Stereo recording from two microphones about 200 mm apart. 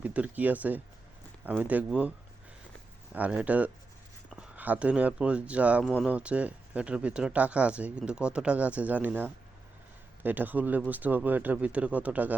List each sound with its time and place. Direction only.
0.0 s speech: 5° right (ahead or behind)
3.2 s speech: 5° right (ahead or behind)